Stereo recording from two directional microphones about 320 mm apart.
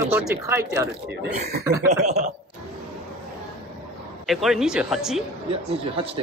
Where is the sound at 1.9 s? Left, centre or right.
Right.